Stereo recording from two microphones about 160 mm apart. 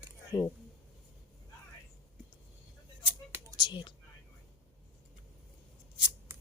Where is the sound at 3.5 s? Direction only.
30° left (ahead or behind).